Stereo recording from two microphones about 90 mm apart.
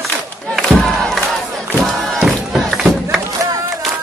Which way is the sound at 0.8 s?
5° left (ahead or behind).